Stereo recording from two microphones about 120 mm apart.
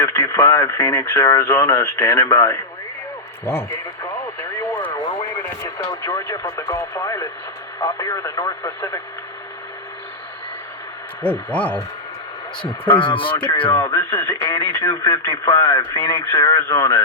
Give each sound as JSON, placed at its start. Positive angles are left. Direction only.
{"t": 0.0, "sound": "speech", "side_deg": 25}
{"t": 5.6, "sound": "speech", "side_deg": 30}
{"t": 11.2, "sound": "a sound", "side_deg": 15}
{"t": 13.0, "sound": "speech", "side_deg": 45}
{"t": 13.8, "sound": "speech", "side_deg": 30}